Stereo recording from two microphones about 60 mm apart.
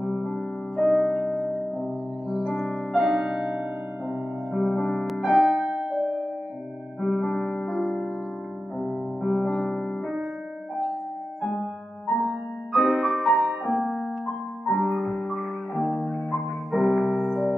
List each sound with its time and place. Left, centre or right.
0.1 s music: centre
5.7 s music: centre
7.0 s music: centre
12.3 s music: centre